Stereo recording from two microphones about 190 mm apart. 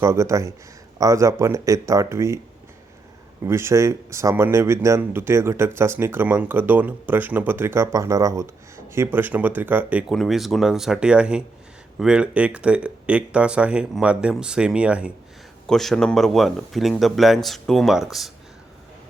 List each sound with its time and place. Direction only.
0.0 s speech: 15° right (ahead or behind)
3.4 s speech: 15° right (ahead or behind)